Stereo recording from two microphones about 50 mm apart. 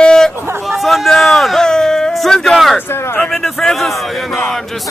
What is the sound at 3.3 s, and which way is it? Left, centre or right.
A man's voice, centre.